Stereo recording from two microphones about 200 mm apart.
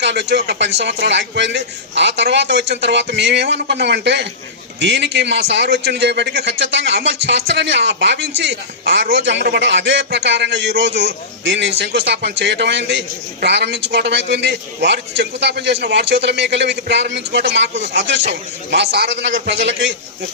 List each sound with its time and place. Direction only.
0.0 s a man's voice: 60° right (ahead or behind)